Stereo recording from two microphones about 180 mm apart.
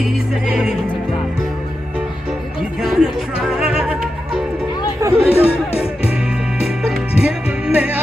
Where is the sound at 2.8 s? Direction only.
Centre (ahead or behind).